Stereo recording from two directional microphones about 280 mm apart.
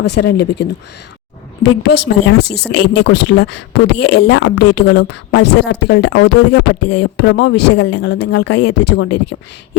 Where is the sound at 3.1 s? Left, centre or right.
Left.